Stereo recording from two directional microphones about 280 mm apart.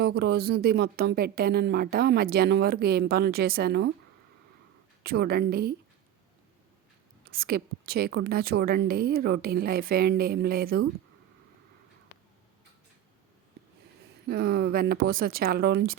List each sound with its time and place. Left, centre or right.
0.0 s speech: right
5.0 s speech: right
7.3 s speech: right
14.3 s speech: right